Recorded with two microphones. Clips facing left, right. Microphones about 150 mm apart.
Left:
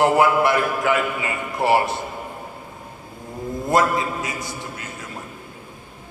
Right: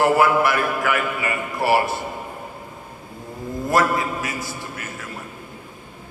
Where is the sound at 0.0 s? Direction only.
20° left (ahead or behind).